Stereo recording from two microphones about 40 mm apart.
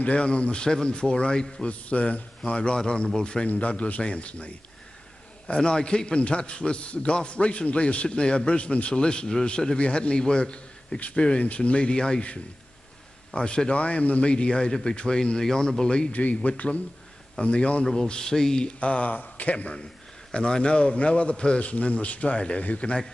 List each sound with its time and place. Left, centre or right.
0.0 s a man's voice: left
3.2 s a man's voice: left
3.4 s a man's voice: left
5.6 s a man's voice: left
13.3 s a man's voice: left
16.1 s a man's voice: left; by 18.7 s centre
18.7 s a man's voice: left
20.3 s a man's voice: left